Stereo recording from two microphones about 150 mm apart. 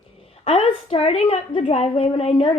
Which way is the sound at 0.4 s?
40° left (ahead or behind).